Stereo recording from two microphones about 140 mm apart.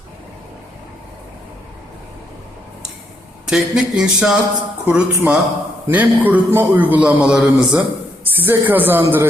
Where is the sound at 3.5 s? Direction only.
5° right (ahead or behind).